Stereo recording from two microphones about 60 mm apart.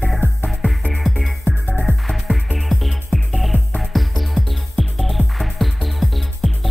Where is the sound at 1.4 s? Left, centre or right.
Left.